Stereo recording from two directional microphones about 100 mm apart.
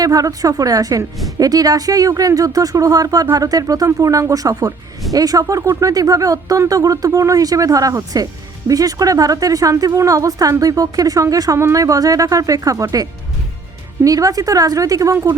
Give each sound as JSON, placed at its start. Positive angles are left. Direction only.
{"t": 0.0, "sound": "speech", "side_deg": -35}